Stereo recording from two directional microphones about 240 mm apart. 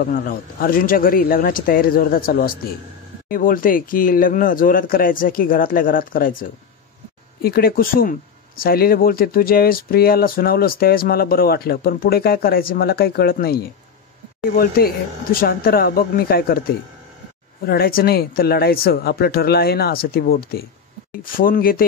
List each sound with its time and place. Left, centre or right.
0.0 s speech: left
7.4 s speech: left
17.6 s speech: left